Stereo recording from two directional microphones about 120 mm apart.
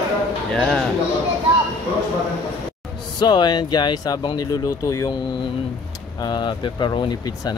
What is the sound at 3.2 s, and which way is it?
Speech, 40° left (ahead or behind).